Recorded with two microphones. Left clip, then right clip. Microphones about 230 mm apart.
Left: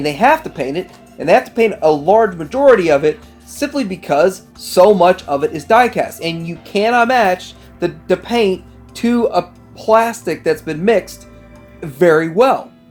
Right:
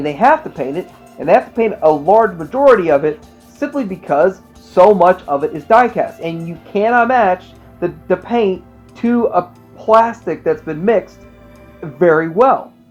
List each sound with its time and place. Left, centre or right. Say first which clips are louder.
0.0 s speech: right 1 dB; left